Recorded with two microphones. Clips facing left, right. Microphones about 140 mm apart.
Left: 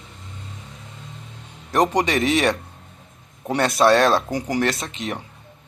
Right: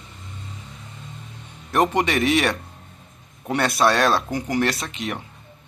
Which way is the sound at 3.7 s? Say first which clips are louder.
Left 3 dB; 20° left (ahead or behind).